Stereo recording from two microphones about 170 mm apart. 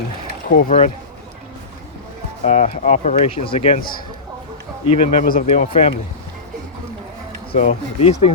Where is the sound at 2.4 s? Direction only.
45° left (ahead or behind).